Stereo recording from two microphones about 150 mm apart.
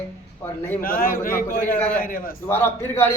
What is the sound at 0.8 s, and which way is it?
Speech, 70° left (ahead or behind).